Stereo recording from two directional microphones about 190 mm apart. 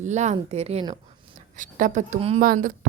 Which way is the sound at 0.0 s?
40° right (ahead or behind).